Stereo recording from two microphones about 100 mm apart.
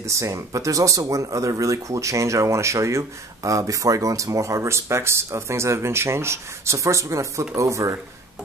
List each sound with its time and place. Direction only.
0.0 s speech: 30° right (ahead or behind)